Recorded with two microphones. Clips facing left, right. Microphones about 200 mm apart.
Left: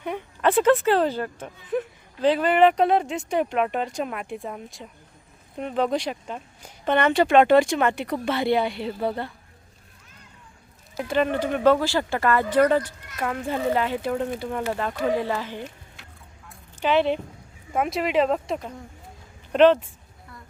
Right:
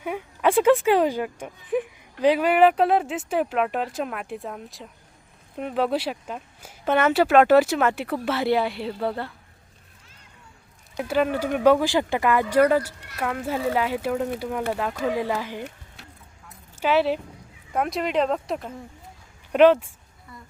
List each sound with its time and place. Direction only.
0.0 s speech: 10° right (ahead or behind)
11.1 s speech: 10° right (ahead or behind)
16.8 s speech: 5° right (ahead or behind)